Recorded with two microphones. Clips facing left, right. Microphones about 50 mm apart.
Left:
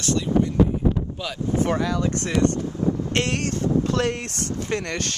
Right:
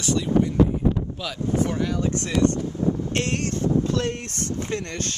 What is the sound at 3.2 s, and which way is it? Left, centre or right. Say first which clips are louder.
Speech: left 1 dB; left.